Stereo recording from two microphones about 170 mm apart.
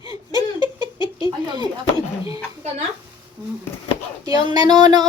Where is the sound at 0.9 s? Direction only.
25° left (ahead or behind).